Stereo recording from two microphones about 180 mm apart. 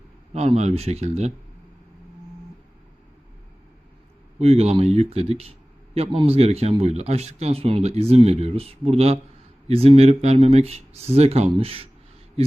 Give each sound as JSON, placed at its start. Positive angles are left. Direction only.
{"t": 0.3, "sound": "speech", "side_deg": -35}
{"t": 4.4, "sound": "speech", "side_deg": -35}